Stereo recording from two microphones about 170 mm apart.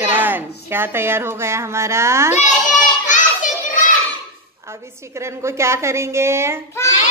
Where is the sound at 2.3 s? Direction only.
45° left (ahead or behind).